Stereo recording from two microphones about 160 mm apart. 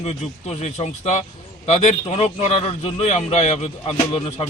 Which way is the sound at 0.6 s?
45° left (ahead or behind).